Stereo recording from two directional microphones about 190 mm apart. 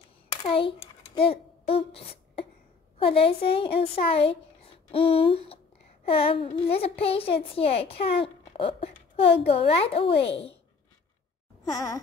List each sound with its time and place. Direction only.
0.5 s a child's voice: 30° left (ahead or behind)
11.7 s gasp: 20° left (ahead or behind)